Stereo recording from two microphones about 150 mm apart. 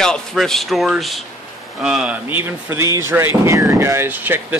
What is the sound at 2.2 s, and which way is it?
Speech, 15° right (ahead or behind).